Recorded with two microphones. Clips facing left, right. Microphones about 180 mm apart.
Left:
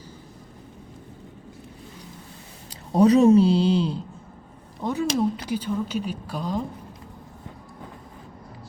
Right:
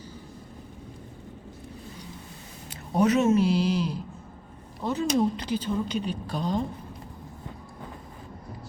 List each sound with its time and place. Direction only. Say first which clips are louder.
2.9 s speech: left 6 dB; 35° left (ahead or behind)
4.8 s speech: left 1 dB; 15° left (ahead or behind)